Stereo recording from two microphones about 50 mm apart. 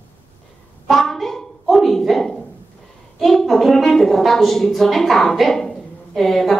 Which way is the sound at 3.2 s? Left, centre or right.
Centre.